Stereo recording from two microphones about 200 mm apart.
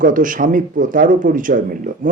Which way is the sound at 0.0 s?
40° right (ahead or behind).